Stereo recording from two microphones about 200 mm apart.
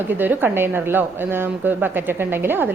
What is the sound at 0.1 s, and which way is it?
A woman's voice, 10° right (ahead or behind).